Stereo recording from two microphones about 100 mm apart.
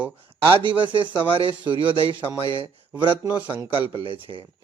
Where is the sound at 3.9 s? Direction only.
60° right (ahead or behind).